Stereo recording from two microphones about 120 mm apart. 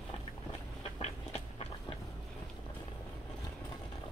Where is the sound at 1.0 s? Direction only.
60° left (ahead or behind).